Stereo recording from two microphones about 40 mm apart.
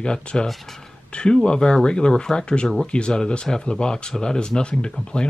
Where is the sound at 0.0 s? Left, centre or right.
Left.